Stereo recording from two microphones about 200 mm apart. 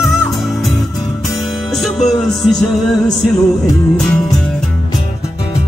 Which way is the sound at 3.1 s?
20° left (ahead or behind).